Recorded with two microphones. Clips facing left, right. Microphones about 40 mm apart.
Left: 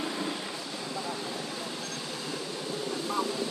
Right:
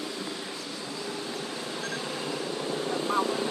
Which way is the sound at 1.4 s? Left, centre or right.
Centre.